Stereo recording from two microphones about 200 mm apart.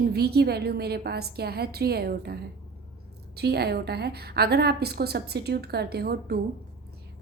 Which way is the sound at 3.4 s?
55° right (ahead or behind).